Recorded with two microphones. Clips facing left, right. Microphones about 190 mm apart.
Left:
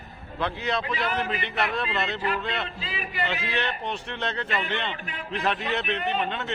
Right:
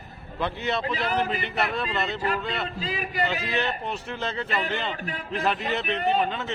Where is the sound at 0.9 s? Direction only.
35° right (ahead or behind).